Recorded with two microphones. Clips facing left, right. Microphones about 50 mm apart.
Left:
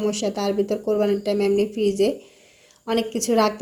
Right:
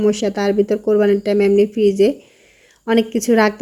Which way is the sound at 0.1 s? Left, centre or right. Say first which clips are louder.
Right 6 dB; right.